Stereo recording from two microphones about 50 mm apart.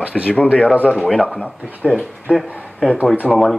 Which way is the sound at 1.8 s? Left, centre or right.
Centre.